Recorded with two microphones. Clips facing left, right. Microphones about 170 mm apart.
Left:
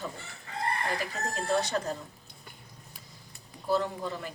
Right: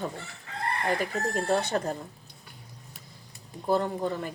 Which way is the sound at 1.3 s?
55° right (ahead or behind).